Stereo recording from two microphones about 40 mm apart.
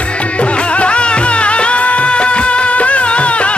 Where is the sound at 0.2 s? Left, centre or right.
Left.